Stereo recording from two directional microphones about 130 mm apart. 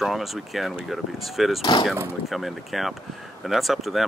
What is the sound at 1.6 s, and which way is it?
Speech, 35° left (ahead or behind).